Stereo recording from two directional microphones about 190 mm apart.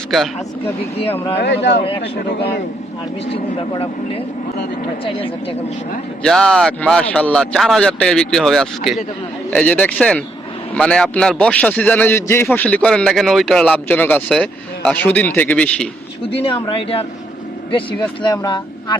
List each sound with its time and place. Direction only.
1.4 s speech: 65° left (ahead or behind)
5.0 s speech: 30° left (ahead or behind)
6.2 s a man's voice: centre (ahead or behind)
16.2 s speech: 30° left (ahead or behind)